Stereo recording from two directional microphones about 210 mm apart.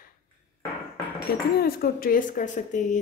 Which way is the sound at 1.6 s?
45° left (ahead or behind).